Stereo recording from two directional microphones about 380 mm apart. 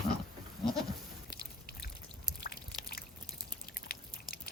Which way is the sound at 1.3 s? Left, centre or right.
Left.